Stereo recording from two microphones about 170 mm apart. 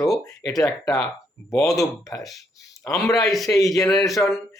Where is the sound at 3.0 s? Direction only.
20° left (ahead or behind).